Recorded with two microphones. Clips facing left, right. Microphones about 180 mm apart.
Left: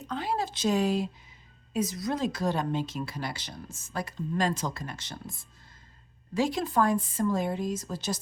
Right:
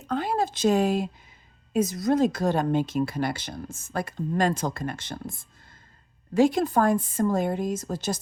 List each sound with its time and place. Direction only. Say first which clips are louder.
0.1 s speech: right 5 dB; 50° right (ahead or behind)
6.3 s speech: right 6 dB; 50° right (ahead or behind)